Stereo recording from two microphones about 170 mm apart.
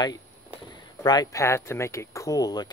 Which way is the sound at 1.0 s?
25° left (ahead or behind).